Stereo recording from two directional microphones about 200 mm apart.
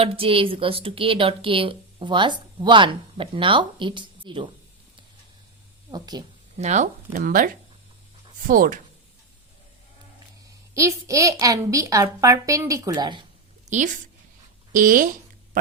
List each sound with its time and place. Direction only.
0.0 s a woman's voice: 30° right (ahead or behind)
5.9 s a woman's voice: 20° right (ahead or behind)
6.6 s speech: 35° right (ahead or behind)
10.8 s a woman's voice: 15° right (ahead or behind)
13.7 s a woman's voice: 40° right (ahead or behind)